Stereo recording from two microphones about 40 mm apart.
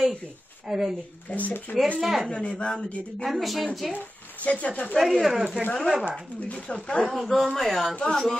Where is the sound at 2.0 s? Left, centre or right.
Centre.